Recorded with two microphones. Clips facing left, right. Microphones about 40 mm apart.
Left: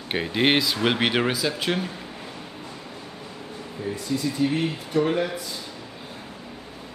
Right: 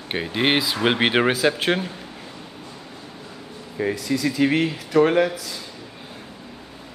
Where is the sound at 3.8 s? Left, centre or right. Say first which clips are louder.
Right 5 dB; right.